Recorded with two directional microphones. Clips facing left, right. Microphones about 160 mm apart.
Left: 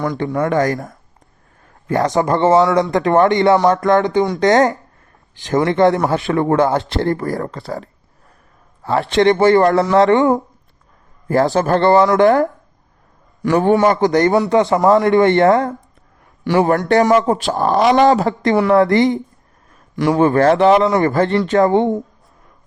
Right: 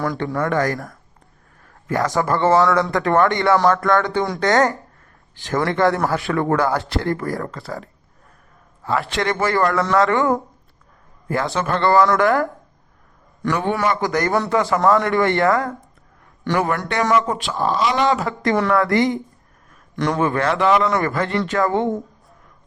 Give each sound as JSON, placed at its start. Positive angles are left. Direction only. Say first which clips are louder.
{"t": 0.3, "sound": "speech", "louder": "left 4 dB", "side_deg": 20}
{"t": 11.3, "sound": "a man's voice", "louder": "left 7 dB", "side_deg": 40}
{"t": 11.8, "sound": "speech", "louder": "left 3 dB", "side_deg": 20}
{"t": 13.5, "sound": "speech", "louder": "left 8 dB", "side_deg": 45}
{"t": 14.0, "sound": "speech", "louder": "left 6 dB", "side_deg": 25}
{"t": 16.6, "sound": "a man's voice", "louder": "left 7 dB", "side_deg": 40}
{"t": 18.2, "sound": "speech", "louder": "left 4 dB", "side_deg": 25}
{"t": 20.1, "sound": "speech", "louder": "left 7 dB", "side_deg": 35}